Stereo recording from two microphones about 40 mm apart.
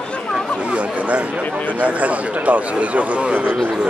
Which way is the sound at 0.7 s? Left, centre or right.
Right.